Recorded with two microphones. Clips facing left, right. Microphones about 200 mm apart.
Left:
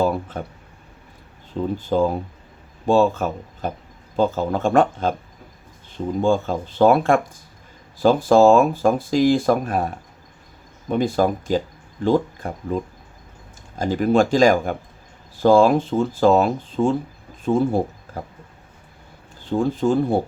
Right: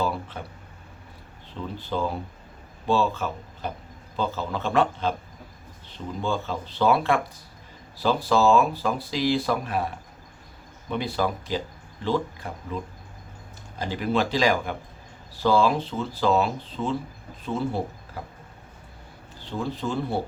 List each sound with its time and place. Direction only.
0.0 s a sound: 45° left (ahead or behind)
1.5 s speech: 45° left (ahead or behind)
6.2 s speech: 45° left (ahead or behind)
19.4 s speech: 50° left (ahead or behind)